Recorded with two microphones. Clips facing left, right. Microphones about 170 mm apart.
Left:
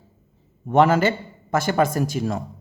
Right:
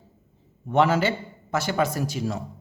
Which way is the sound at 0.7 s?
50° left (ahead or behind).